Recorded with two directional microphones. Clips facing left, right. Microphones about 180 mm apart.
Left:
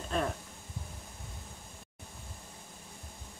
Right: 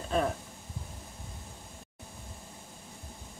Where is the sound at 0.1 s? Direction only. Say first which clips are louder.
Right 4 dB; centre (ahead or behind).